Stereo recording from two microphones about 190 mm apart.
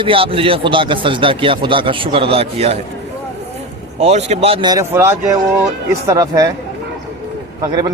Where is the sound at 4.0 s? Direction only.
35° right (ahead or behind); by 6.4 s 20° right (ahead or behind).